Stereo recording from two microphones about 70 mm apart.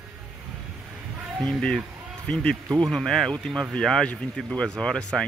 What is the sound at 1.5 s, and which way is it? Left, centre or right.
Speech, centre.